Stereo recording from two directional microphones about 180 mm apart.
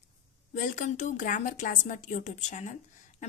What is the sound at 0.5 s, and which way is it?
Speech, 45° left (ahead or behind).